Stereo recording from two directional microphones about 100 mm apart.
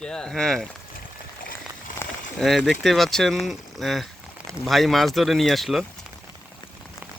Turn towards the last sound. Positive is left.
turn(degrees=0)  # may be behind; listen again after turning